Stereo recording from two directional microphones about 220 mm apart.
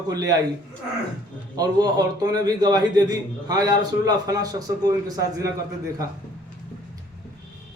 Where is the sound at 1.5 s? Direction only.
15° right (ahead or behind).